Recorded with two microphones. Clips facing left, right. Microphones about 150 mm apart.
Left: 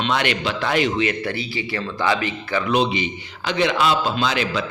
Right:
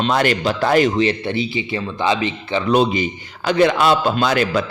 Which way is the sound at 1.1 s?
20° right (ahead or behind).